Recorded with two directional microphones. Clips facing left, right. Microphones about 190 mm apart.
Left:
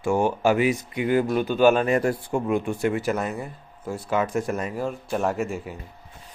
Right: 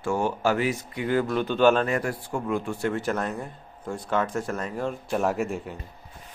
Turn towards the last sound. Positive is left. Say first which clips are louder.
# even
turn(degrees=0)  # may be behind; listen again after turning